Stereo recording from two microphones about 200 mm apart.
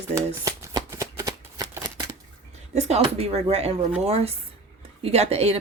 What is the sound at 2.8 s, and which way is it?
A woman's voice, 30° right (ahead or behind).